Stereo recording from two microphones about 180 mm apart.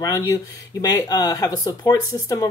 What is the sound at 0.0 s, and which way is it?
Speech, 20° left (ahead or behind).